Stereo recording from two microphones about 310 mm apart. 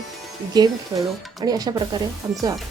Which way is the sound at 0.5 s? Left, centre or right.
Centre.